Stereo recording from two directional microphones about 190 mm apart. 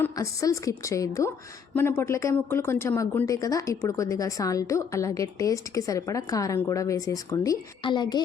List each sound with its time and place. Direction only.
0.0 s speech: 15° left (ahead or behind)